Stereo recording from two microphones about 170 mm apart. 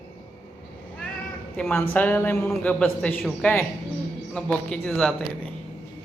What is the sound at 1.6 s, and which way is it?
A man's voice, 5° left (ahead or behind).